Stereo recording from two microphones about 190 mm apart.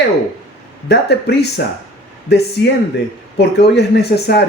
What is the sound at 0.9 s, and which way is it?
Speech, 60° left (ahead or behind).